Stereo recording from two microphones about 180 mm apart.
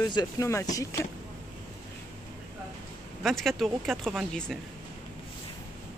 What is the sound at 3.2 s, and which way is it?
Speech, centre (ahead or behind).